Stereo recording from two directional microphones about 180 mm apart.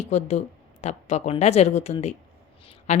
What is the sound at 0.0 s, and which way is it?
Speech, 40° left (ahead or behind).